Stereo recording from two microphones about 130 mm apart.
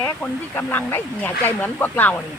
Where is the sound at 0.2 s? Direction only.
15° left (ahead or behind).